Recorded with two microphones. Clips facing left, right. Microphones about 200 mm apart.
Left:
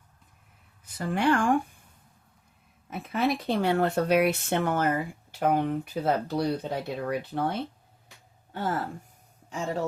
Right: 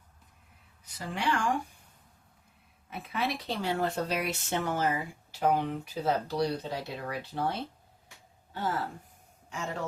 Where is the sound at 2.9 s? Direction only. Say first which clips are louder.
Left 6 dB; 45° left (ahead or behind).